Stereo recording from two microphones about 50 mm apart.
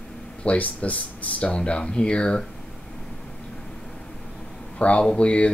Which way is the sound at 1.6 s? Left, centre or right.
Centre.